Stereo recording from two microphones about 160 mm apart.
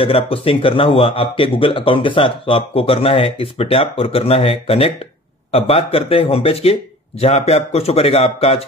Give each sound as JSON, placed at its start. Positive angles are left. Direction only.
{"t": 0.0, "sound": "a man's voice", "side_deg": 35}